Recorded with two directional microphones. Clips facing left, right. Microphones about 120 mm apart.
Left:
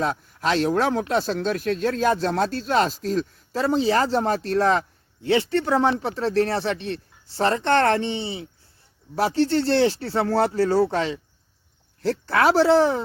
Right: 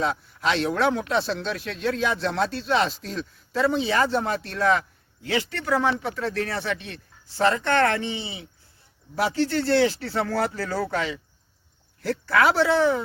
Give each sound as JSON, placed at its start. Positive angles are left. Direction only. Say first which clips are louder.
{"t": 0.0, "sound": "speech", "louder": "left 1 dB", "side_deg": 40}